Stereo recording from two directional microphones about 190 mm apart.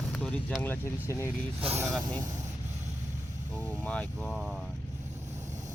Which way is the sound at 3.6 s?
10° left (ahead or behind).